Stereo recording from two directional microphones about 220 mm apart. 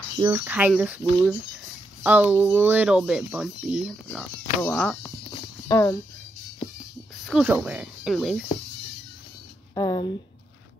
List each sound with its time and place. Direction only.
0.2 s speech: 10° right (ahead or behind)
2.0 s speech: 5° right (ahead or behind); by 5.9 s 15° left (ahead or behind)
7.2 s speech: 5° right (ahead or behind)
9.8 s speech: 20° left (ahead or behind)